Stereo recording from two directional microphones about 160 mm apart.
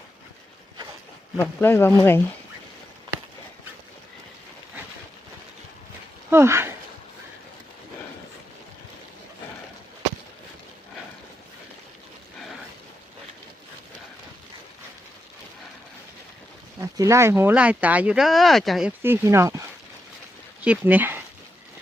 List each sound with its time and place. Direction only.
1.4 s speech: 15° left (ahead or behind)
6.3 s speech: 15° right (ahead or behind)
16.8 s speech: 20° right (ahead or behind)
20.7 s speech: 10° right (ahead or behind)